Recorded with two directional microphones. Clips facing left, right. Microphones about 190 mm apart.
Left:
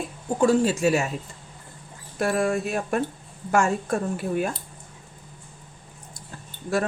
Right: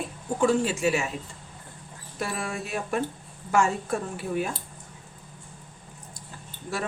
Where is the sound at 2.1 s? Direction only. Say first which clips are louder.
Left 9 dB; 50° left (ahead or behind).